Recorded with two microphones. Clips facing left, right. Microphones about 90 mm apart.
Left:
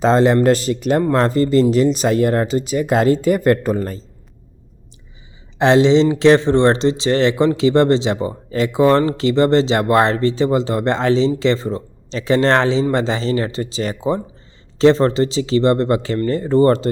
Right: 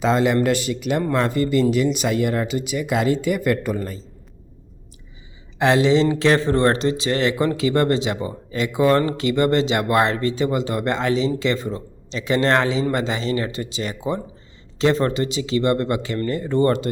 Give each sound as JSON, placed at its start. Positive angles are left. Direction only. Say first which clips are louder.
{"t": 0.0, "sound": "speech", "louder": "left 5 dB", "side_deg": 35}
{"t": 5.5, "sound": "speech", "louder": "left 4 dB", "side_deg": 25}